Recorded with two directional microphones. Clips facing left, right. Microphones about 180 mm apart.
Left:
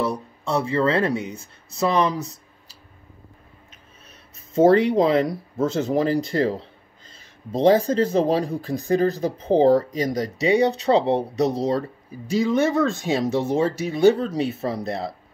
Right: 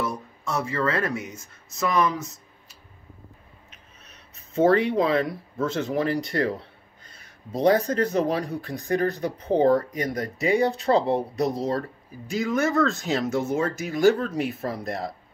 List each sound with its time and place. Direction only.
0.0 s speech: 30° left (ahead or behind)
4.6 s speech: 35° left (ahead or behind)
10.0 s speech: 80° left
12.4 s speech: 30° left (ahead or behind)